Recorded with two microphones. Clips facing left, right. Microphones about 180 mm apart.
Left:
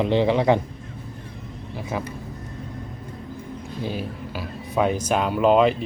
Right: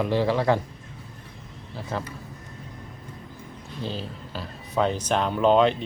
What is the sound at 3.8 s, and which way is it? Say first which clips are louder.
Speech: left 3 dB; 10° left (ahead or behind).